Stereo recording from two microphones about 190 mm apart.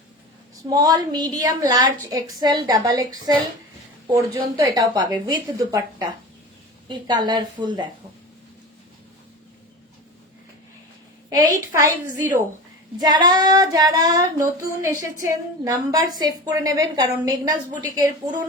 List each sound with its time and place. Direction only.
0.7 s female singing: 20° right (ahead or behind)
6.8 s female singing: 25° right (ahead or behind)
11.3 s a woman's voice: 20° right (ahead or behind)
13.0 s female singing: 20° right (ahead or behind)